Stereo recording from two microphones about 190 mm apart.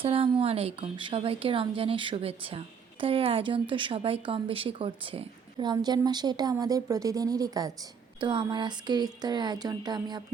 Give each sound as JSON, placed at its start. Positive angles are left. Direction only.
{"t": 0.0, "sound": "a woman's voice", "side_deg": -30}